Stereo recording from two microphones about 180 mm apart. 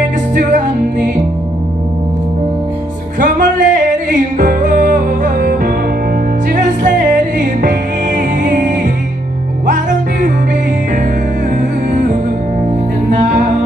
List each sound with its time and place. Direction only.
0.3 s music: 50° right (ahead or behind)
3.2 s music: 45° right (ahead or behind)
11.9 s music: 45° right (ahead or behind)